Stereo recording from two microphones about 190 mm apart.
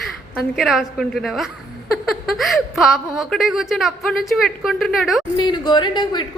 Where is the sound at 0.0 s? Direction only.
Centre (ahead or behind).